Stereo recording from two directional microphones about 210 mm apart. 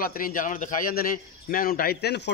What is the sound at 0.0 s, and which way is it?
A man's voice, 40° left (ahead or behind).